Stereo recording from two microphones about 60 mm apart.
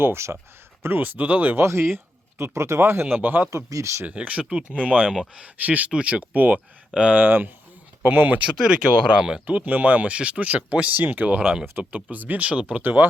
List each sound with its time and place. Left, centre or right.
0.0 s speech: right
1.5 s speech: right
3.5 s speech: right
4.0 s speech: right
7.2 s speech: right
9.0 s speech: centre
9.5 s speech: right
12.5 s speech: centre
12.8 s speech: right